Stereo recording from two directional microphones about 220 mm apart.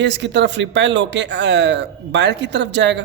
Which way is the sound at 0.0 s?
55° right (ahead or behind).